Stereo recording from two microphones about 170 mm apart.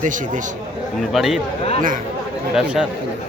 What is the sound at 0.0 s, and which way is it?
Speech, 50° right (ahead or behind).